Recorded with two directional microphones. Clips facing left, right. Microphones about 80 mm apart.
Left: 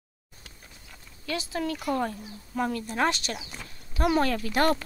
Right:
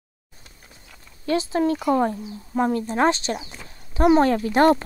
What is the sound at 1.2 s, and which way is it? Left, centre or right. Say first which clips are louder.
Speech: right 9 dB; right.